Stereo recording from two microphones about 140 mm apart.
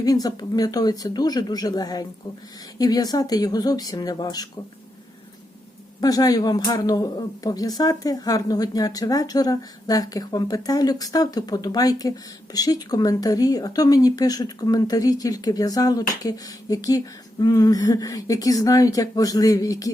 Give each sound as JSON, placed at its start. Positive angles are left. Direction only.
{"t": 0.0, "sound": "speech", "side_deg": 25}
{"t": 6.0, "sound": "speech", "side_deg": 25}